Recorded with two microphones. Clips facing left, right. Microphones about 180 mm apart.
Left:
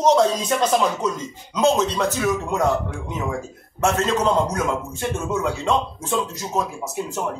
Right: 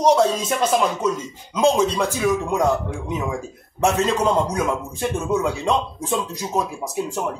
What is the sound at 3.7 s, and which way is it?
Speech, 15° right (ahead or behind).